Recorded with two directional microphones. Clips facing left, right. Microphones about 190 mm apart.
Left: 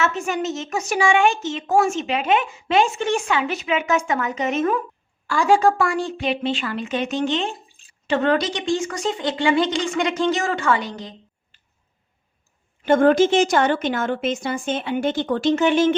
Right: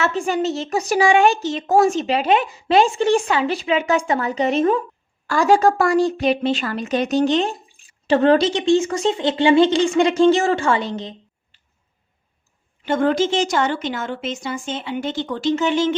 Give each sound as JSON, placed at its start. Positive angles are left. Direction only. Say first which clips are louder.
{"t": 0.0, "sound": "speech", "louder": "right 3 dB", "side_deg": -30}
{"t": 12.8, "sound": "a woman's voice", "louder": "left 3 dB", "side_deg": 50}